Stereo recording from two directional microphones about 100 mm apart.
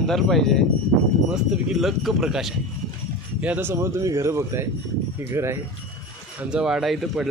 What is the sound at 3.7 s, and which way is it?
Speech, 30° right (ahead or behind).